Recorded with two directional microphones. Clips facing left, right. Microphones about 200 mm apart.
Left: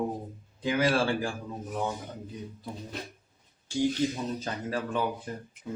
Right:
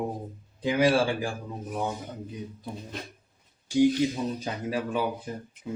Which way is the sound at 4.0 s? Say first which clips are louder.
Right 2 dB; 15° right (ahead or behind).